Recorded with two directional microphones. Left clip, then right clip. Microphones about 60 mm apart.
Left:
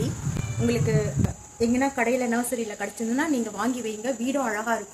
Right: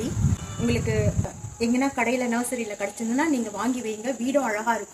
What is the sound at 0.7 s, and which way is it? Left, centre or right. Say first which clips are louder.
Speech: left 1 dB; left.